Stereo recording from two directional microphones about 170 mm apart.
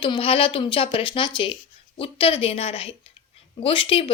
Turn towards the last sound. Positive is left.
turn(degrees=30)  # may be behind; listen again after turning